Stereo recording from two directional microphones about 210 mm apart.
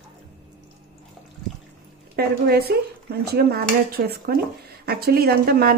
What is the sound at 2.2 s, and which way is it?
Speech, 50° right (ahead or behind).